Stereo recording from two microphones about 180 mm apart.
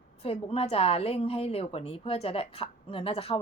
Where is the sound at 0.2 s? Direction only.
35° left (ahead or behind).